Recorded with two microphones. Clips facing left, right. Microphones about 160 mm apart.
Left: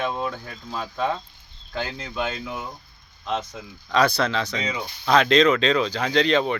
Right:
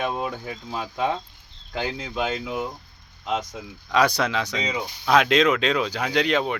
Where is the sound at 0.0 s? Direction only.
15° right (ahead or behind).